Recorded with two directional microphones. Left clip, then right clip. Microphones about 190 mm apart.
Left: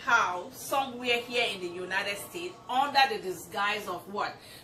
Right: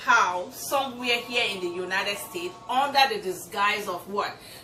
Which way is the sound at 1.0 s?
15° right (ahead or behind).